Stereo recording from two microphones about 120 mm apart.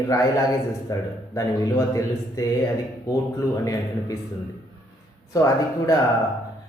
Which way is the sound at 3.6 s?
30° left (ahead or behind).